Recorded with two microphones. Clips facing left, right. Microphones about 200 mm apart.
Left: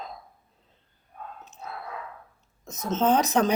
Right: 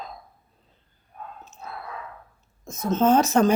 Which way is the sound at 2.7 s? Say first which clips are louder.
Right 4 dB; 20° left (ahead or behind).